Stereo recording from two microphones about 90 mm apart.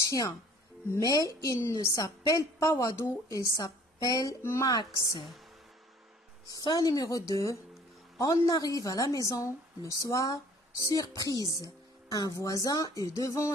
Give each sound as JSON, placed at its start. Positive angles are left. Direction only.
{"t": 0.1, "sound": "a woman's voice", "side_deg": 40}
{"t": 6.6, "sound": "a woman's voice", "side_deg": 50}